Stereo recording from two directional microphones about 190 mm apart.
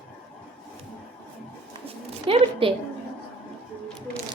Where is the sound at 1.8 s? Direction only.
30° right (ahead or behind).